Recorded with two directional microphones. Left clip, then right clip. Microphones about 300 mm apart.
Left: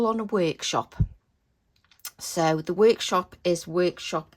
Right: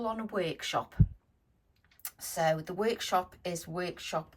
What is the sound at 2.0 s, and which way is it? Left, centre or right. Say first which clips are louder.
Speech: left 6 dB; centre.